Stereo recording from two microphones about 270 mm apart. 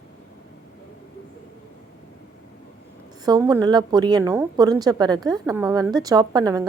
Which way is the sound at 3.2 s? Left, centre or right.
Centre.